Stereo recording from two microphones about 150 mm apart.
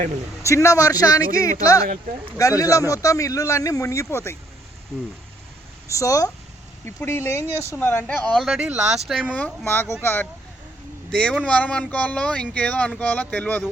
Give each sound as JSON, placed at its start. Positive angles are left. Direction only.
{"t": 0.4, "sound": "a man's voice", "side_deg": 20}
{"t": 5.9, "sound": "a man's voice", "side_deg": 20}
{"t": 9.3, "sound": "speech", "side_deg": 10}